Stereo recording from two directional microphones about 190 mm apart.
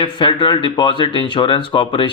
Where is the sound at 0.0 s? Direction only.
25° left (ahead or behind).